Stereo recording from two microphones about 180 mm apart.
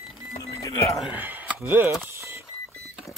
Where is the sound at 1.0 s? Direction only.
10° right (ahead or behind).